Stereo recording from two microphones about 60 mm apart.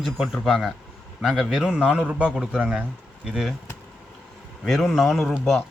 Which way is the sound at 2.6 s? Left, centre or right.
Right.